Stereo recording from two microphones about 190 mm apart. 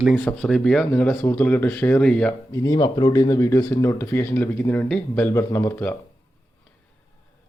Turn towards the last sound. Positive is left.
turn(degrees=10)  # may be behind; listen again after turning